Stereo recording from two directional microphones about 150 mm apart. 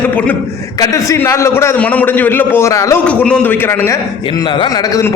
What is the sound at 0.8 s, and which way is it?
A man's voice, 20° left (ahead or behind).